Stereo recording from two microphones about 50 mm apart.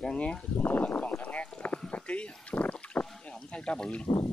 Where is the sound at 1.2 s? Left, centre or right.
Left.